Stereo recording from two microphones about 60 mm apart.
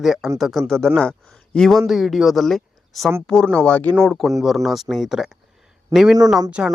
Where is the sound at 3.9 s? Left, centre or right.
Centre.